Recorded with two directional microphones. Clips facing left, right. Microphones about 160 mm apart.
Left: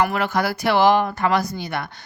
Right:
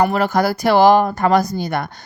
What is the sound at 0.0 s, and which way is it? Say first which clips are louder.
Speech: right 5 dB; 40° right (ahead or behind).